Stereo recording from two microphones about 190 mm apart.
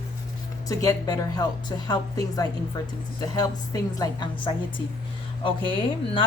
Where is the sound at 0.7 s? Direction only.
20° left (ahead or behind).